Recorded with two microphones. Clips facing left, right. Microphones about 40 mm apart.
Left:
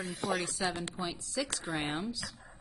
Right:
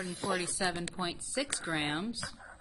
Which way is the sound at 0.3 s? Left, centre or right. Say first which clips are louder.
Even; centre.